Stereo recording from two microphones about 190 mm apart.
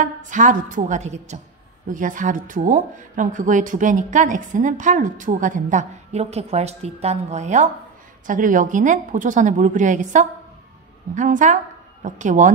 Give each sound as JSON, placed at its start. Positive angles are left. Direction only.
{"t": 0.0, "sound": "a woman's voice", "side_deg": -40}